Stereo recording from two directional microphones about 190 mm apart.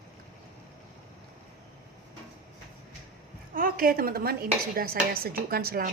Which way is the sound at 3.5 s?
50° right (ahead or behind).